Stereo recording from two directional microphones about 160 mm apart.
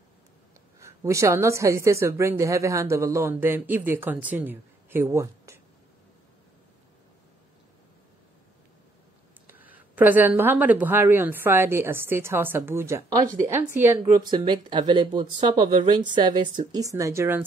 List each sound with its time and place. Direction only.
0.7 s a woman's voice: 20° right (ahead or behind)
9.5 s a woman's voice: 10° right (ahead or behind)
14.3 s speech: 30° right (ahead or behind)